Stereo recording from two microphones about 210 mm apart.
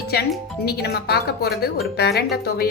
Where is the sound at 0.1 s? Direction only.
50° left (ahead or behind).